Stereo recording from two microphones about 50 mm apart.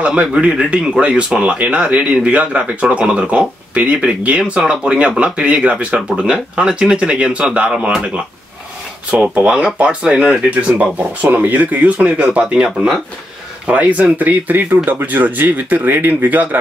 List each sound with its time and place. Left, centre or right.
0.0 s speech: right
10.5 s speech: right
13.7 s speech: right